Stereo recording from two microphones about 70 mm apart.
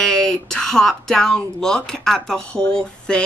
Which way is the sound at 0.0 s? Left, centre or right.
Centre.